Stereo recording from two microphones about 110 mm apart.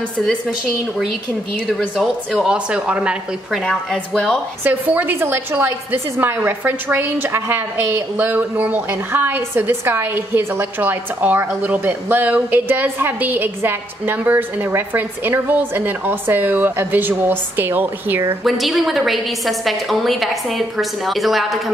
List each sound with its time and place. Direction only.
1.7 s a woman's voice: centre (ahead or behind)
3.6 s a woman's voice: 5° left (ahead or behind)
4.6 s a woman's voice: 15° right (ahead or behind)
18.4 s a woman's voice: centre (ahead or behind)